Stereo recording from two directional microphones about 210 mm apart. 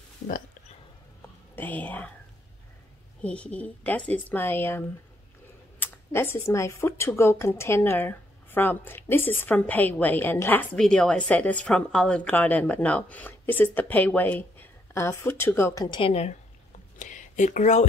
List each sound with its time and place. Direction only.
1.5 s speech: 10° left (ahead or behind)
3.2 s speech: 5° left (ahead or behind); by 17.8 s 35° left (ahead or behind)